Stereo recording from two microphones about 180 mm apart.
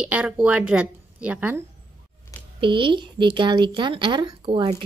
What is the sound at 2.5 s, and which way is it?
A woman's voice, 30° right (ahead or behind).